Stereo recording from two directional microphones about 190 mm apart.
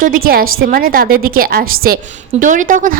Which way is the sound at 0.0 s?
50° right (ahead or behind).